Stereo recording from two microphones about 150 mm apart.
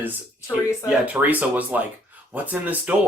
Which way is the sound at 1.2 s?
10° right (ahead or behind).